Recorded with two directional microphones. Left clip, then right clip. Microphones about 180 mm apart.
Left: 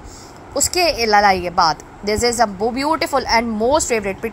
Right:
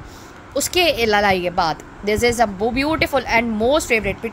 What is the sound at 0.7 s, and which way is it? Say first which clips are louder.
A woman's voice: left 1 dB; 30° right (ahead or behind).